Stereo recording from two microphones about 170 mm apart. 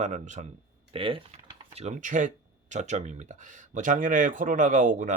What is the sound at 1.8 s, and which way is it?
Speech, 45° right (ahead or behind).